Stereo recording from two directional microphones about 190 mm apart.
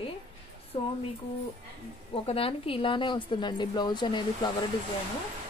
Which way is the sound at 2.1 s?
30° left (ahead or behind).